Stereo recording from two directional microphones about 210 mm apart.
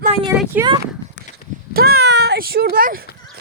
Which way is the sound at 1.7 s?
50° right (ahead or behind).